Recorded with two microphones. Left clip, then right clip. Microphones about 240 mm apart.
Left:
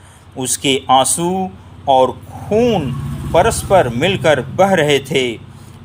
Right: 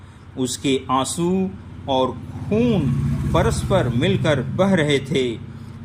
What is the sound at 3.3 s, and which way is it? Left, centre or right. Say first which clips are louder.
A man's voice: left 8 dB; left.